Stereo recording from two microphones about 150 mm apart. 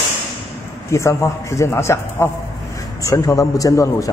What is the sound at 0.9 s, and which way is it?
A man's voice, 20° left (ahead or behind).